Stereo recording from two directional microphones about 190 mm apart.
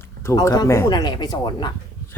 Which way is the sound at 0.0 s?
15° left (ahead or behind).